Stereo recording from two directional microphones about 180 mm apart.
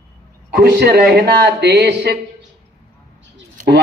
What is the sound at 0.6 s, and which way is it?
A man's voice, 60° right (ahead or behind).